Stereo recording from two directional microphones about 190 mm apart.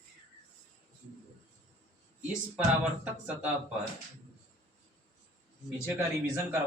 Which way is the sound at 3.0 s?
5° right (ahead or behind).